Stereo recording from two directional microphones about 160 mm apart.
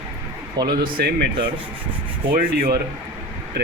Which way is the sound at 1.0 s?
90° right.